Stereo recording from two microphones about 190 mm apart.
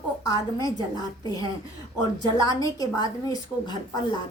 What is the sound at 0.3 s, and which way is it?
A woman's voice, 20° left (ahead or behind).